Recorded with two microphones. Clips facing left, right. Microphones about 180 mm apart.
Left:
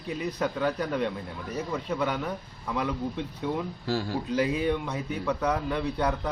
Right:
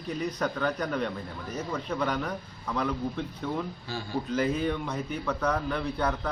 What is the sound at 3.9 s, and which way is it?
Speech, 90° left.